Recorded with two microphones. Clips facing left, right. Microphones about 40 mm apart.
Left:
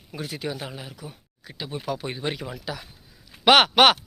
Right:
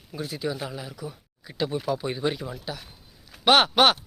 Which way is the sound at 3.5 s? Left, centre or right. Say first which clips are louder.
Left 2 dB; left.